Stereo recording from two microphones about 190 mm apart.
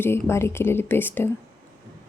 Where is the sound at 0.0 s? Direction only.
15° left (ahead or behind).